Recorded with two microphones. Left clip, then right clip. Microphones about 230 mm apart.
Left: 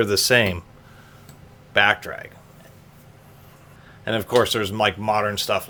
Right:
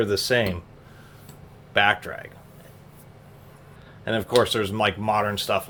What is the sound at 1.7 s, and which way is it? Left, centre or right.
Speech, centre.